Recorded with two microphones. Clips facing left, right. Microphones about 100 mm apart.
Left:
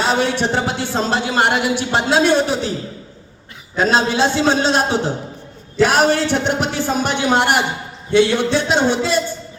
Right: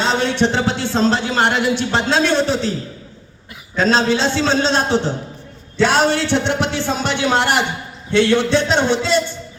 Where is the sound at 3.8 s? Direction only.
15° left (ahead or behind).